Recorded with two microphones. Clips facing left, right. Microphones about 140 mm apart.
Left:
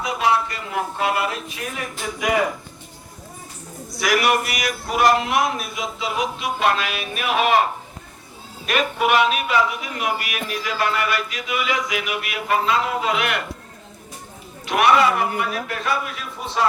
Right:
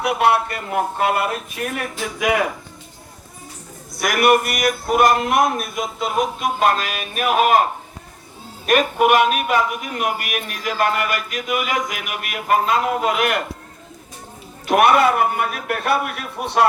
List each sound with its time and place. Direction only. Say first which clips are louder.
0.0 s a man's voice: right 3 dB; 65° right (ahead or behind)
3.9 s a man's voice: right 3 dB; 50° right (ahead or behind)
8.6 s a man's voice: right 5 dB; 50° right (ahead or behind)
14.7 s a man's voice: right 2 dB; 50° right (ahead or behind)